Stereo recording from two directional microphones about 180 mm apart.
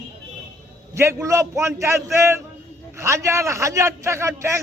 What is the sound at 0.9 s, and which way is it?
A man's voice, 15° right (ahead or behind).